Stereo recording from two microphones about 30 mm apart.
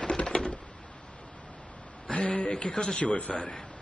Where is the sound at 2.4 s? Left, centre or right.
Left.